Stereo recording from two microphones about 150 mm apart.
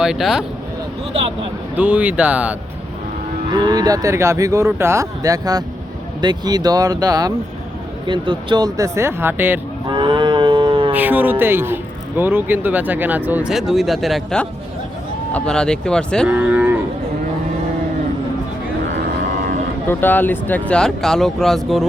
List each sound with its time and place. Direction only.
0.0 s speech: 5° right (ahead or behind)
1.1 s speech: 40° right (ahead or behind)
1.7 s speech: 10° right (ahead or behind)
3.5 s speech: 30° right (ahead or behind)
9.9 s livestock: 30° right (ahead or behind)
10.9 s speech: 10° right (ahead or behind); by 16.2 s 5° left (ahead or behind)
16.2 s cattle: 10° right (ahead or behind)
19.9 s speech: 15° left (ahead or behind)